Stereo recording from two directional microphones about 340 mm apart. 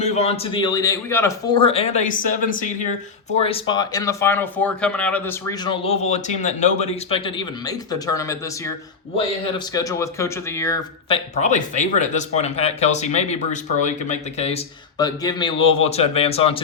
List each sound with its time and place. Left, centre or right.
0.0 s speech: centre
9.7 s speech: centre